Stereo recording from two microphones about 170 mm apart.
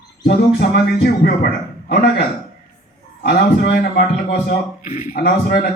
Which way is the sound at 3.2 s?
65° left (ahead or behind).